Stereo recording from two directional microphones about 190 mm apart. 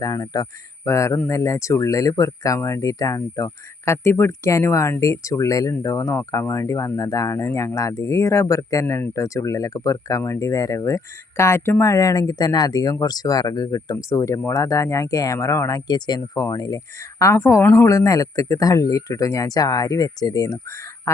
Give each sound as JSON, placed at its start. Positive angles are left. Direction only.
{"t": 0.0, "sound": "speech", "side_deg": 20}